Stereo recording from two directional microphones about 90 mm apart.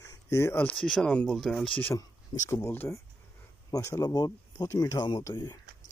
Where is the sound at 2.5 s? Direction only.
25° left (ahead or behind).